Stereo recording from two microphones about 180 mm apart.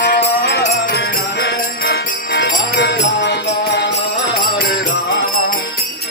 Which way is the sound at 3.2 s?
70° left (ahead or behind).